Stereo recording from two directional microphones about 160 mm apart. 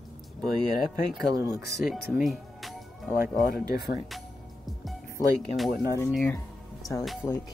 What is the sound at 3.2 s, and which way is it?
Speech, 65° left (ahead or behind).